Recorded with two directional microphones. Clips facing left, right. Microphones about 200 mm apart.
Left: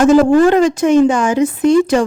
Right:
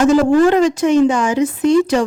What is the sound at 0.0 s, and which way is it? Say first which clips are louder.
Speech: left 2 dB; 50° left (ahead or behind).